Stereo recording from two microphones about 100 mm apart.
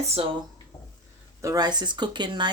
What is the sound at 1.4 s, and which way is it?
Speech, 40° right (ahead or behind).